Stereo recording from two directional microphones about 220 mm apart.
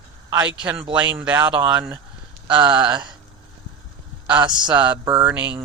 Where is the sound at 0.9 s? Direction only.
5° right (ahead or behind).